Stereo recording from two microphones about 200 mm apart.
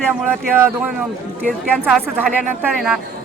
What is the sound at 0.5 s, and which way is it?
Speech, 10° right (ahead or behind).